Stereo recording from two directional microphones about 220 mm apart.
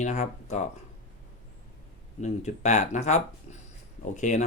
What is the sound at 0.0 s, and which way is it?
Speech, 30° left (ahead or behind).